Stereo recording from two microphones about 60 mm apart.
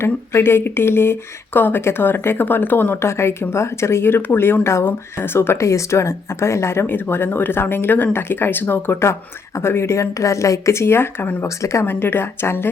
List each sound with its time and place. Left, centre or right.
0.0 s speech: left
3.0 s speech: left
5.5 s speech: left
11.4 s speech: left
11.9 s speech: left